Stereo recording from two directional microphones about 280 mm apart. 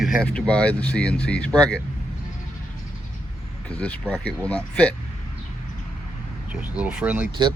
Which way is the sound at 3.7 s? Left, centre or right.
Centre.